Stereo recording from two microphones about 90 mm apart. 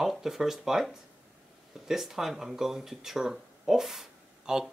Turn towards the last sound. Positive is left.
turn(degrees=-5)  # may be behind; listen again after turning